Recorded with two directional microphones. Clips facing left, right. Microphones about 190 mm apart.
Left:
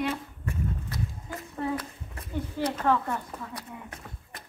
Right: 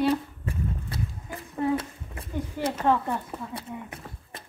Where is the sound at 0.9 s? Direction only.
25° right (ahead or behind).